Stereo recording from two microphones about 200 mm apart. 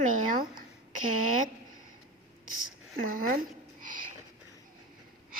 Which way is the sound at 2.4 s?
45° right (ahead or behind).